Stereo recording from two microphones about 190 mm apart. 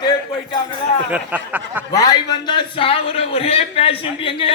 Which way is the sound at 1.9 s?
20° left (ahead or behind).